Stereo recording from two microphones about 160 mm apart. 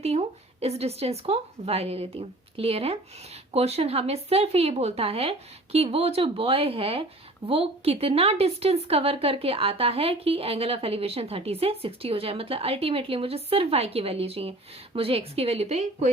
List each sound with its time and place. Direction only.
0.0 s speech: 40° right (ahead or behind)